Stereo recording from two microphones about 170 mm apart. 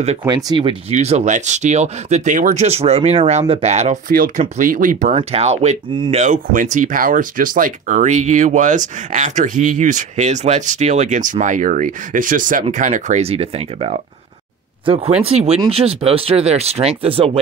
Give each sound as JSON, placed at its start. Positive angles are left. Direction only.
{"t": 0.3, "sound": "speech", "side_deg": -25}
{"t": 0.9, "sound": "speech", "side_deg": -40}
{"t": 4.1, "sound": "speech", "side_deg": -55}
{"t": 5.1, "sound": "speech", "side_deg": -35}
{"t": 6.2, "sound": "speech", "side_deg": -50}
{"t": 15.2, "sound": "speech", "side_deg": -35}